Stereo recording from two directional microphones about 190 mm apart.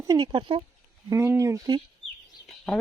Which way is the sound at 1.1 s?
15° right (ahead or behind).